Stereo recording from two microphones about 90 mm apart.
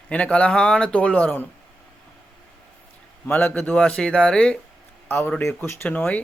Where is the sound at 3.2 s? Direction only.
15° left (ahead or behind).